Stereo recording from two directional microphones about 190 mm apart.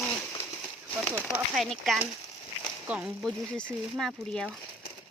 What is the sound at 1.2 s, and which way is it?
Speech, centre (ahead or behind).